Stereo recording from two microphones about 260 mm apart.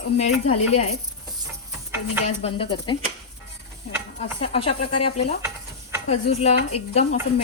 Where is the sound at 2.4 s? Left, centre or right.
Left.